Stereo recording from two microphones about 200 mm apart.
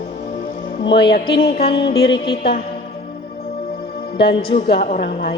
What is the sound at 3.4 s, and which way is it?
Music, 25° left (ahead or behind).